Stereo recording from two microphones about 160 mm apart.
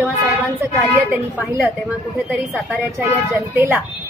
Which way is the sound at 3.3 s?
15° right (ahead or behind).